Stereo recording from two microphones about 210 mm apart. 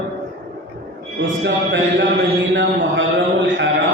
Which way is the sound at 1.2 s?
60° right (ahead or behind).